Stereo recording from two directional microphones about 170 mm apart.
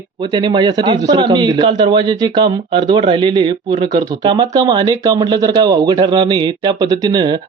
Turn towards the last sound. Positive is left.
turn(degrees=-25)  # may be behind; listen again after turning